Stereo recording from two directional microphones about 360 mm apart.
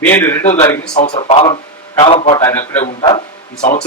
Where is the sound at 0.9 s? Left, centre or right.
Centre.